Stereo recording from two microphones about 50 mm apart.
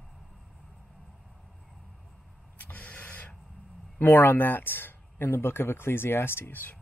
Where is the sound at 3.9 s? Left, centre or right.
Left.